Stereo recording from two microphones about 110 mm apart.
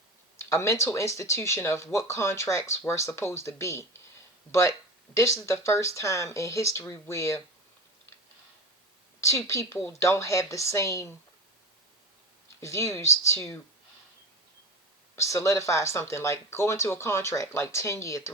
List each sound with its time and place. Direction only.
0.3 s speech: 25° left (ahead or behind)
5.1 s speech: 25° left (ahead or behind)
9.2 s speech: 25° left (ahead or behind)
12.5 s speech: 25° left (ahead or behind)
15.1 s speech: 25° left (ahead or behind)